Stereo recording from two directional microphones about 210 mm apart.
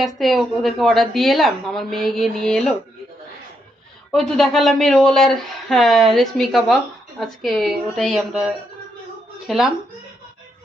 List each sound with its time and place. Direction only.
0.2 s speech: centre (ahead or behind)
4.1 s speech: centre (ahead or behind)